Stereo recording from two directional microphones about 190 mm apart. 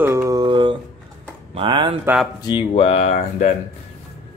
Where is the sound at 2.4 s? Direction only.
30° left (ahead or behind).